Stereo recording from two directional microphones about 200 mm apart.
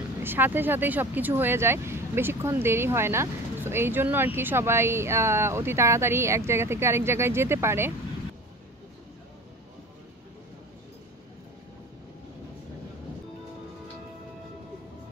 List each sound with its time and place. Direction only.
0.2 s speech: 10° right (ahead or behind)